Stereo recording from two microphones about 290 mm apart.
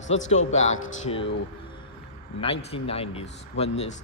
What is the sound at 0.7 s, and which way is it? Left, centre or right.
Speech, left.